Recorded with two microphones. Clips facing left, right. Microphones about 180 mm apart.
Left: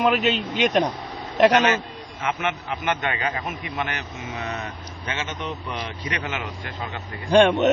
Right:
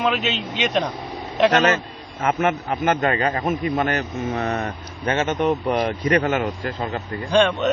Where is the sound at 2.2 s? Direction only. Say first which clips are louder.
Right 6 dB; 45° right (ahead or behind).